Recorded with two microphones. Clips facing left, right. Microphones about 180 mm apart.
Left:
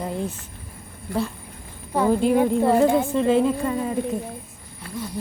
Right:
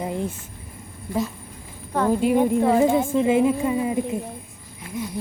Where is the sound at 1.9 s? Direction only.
10° left (ahead or behind); by 4.2 s 10° right (ahead or behind).